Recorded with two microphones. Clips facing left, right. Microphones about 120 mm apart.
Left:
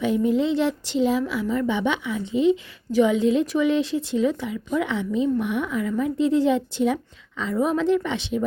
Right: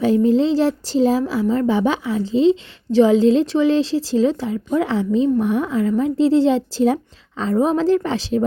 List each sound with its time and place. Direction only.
0.0 s a woman's voice: 35° right (ahead or behind)